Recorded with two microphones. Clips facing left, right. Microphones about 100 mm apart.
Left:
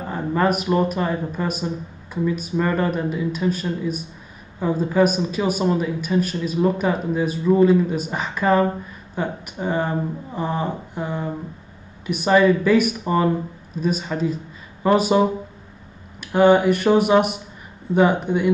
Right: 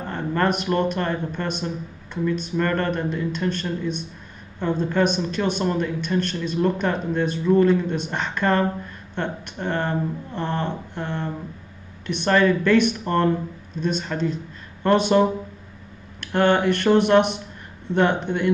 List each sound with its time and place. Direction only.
0.0 s speech: 5° left (ahead or behind)